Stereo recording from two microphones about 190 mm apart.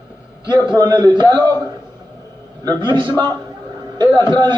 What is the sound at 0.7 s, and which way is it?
Speech, 25° right (ahead or behind).